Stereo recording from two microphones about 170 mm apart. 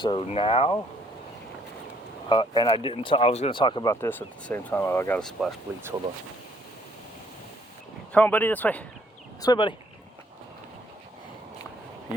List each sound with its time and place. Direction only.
0.0 s speech: 30° left (ahead or behind)
2.3 s speech: 25° left (ahead or behind)
4.0 s speech: 10° left (ahead or behind)
8.1 s speech: 10° left (ahead or behind)
9.4 s speech: 25° left (ahead or behind)